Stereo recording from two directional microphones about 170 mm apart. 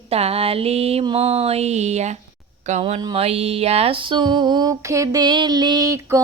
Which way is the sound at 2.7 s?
40° right (ahead or behind).